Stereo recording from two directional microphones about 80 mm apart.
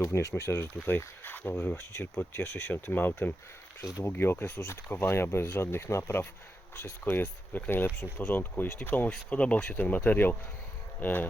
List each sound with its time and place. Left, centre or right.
0.0 s speech: left